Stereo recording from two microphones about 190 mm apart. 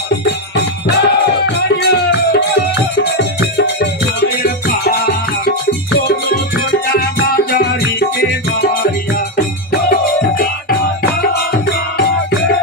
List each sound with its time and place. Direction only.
0.1 s music: 60° left (ahead or behind)
12.0 s music: 55° left (ahead or behind)